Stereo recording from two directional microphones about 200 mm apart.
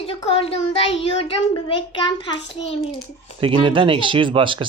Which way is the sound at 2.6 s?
30° left (ahead or behind).